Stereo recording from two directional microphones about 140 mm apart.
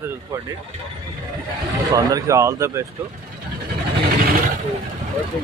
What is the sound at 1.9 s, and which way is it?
Speech, 25° right (ahead or behind).